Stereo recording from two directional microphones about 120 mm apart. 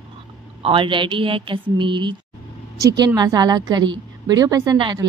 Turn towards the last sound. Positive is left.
turn(degrees=-35)  # may be behind; listen again after turning